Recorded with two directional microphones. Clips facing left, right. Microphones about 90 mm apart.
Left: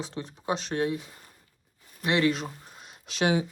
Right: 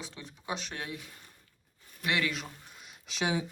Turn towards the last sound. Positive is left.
turn(degrees=65)  # may be behind; listen again after turning